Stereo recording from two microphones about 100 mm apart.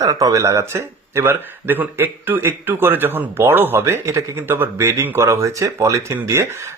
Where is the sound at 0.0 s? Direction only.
35° right (ahead or behind).